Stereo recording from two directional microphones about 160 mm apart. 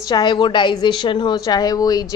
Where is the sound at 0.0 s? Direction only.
25° left (ahead or behind).